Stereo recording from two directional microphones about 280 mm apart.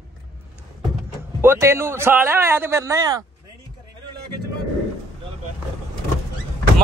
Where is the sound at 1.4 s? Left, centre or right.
Centre.